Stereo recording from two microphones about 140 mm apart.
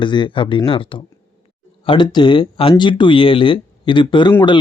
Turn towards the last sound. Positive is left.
turn(degrees=35)  # may be behind; listen again after turning